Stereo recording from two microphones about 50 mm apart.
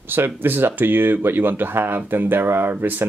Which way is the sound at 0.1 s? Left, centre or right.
Right.